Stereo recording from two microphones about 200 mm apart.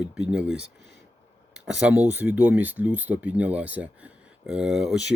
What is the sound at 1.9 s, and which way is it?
Speech, 10° right (ahead or behind).